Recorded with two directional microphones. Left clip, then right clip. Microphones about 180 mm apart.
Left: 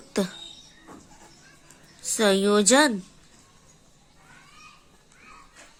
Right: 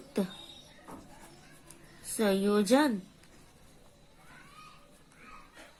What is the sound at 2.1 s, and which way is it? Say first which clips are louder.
Speech: left 8 dB; 30° left (ahead or behind).